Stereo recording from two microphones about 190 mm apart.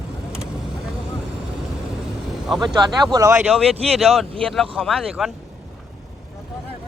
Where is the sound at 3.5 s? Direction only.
Centre (ahead or behind).